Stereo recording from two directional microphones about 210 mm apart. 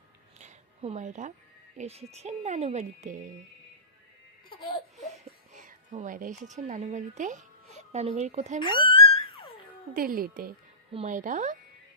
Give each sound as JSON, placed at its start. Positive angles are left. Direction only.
{"t": 0.3, "sound": "a sound", "side_deg": -30}
{"t": 1.8, "sound": "speech", "side_deg": -30}
{"t": 4.4, "sound": "baby cry", "side_deg": 25}
{"t": 5.1, "sound": "speech", "side_deg": -35}
{"t": 8.9, "sound": "a sound", "side_deg": 25}
{"t": 9.9, "sound": "speech", "side_deg": -40}